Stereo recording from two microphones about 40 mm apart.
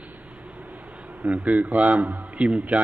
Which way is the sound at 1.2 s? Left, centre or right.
Right.